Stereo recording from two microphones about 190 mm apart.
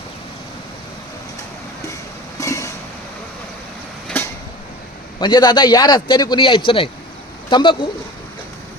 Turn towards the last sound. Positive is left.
turn(degrees=25)  # may be behind; listen again after turning